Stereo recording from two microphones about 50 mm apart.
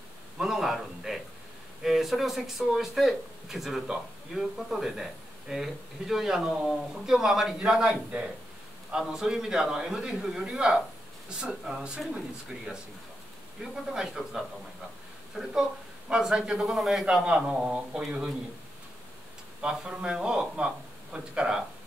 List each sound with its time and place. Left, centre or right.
0.4 s speech: centre
13.6 s speech: centre
19.6 s speech: centre